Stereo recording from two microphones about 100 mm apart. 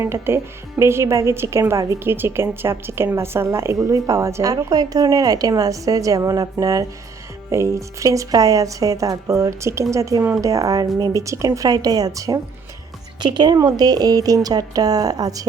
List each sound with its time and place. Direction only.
0.0 s a woman's voice: 25° right (ahead or behind)
3.8 s a woman's voice: 35° right (ahead or behind)
4.5 s a woman's voice: 40° right (ahead or behind)
13.2 s a woman's voice: 50° right (ahead or behind)